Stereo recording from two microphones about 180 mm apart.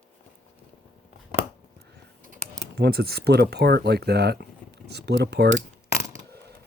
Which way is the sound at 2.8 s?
60° right (ahead or behind).